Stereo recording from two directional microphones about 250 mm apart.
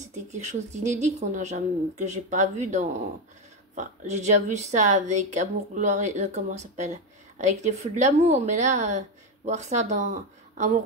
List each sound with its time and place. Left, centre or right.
0.0 s a woman's voice: right